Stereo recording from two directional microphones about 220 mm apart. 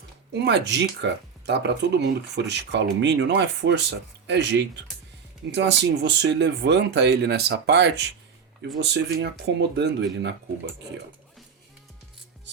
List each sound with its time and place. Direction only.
0.4 s speech: 50° right (ahead or behind)